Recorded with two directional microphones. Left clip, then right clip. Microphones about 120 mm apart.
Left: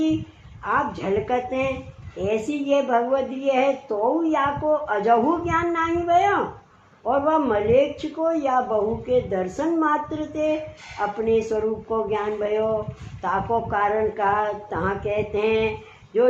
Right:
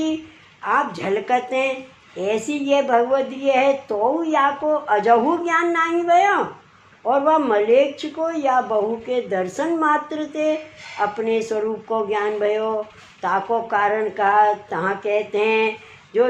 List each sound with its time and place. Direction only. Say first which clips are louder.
0.6 s a woman's voice: right 3 dB; 45° right (ahead or behind)